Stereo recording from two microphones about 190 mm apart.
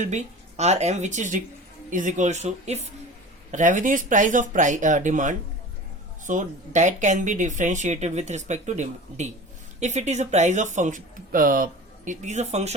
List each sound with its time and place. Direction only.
0.0 s speech: 35° right (ahead or behind)